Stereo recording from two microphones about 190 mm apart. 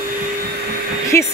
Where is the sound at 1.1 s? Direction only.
15° left (ahead or behind).